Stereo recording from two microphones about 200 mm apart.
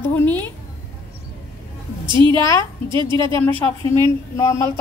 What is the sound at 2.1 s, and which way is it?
A woman's voice, 25° right (ahead or behind).